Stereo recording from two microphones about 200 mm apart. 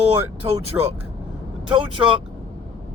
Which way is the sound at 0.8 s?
10° right (ahead or behind).